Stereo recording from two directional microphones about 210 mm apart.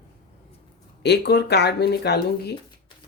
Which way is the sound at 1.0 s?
50° left (ahead or behind).